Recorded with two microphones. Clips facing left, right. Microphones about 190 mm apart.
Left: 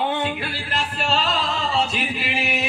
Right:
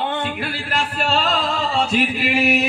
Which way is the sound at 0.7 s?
50° right (ahead or behind).